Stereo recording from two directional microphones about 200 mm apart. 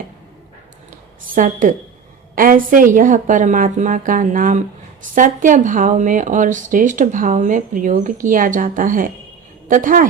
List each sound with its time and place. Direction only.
1.4 s speech: 40° right (ahead or behind)